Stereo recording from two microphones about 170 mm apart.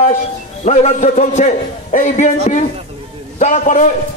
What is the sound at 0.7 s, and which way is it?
A man's voice, 45° left (ahead or behind).